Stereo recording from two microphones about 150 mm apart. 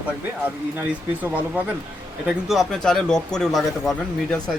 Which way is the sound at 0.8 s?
10° right (ahead or behind).